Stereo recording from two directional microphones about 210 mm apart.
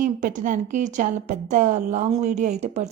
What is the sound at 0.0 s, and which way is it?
A woman's voice, 40° right (ahead or behind).